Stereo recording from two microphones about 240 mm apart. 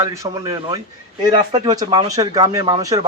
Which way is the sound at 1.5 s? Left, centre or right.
Centre.